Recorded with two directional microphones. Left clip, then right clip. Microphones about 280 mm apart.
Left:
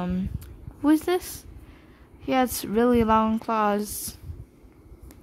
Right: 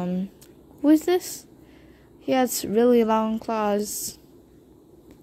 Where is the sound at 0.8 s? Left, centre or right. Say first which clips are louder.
Right 3 dB; centre.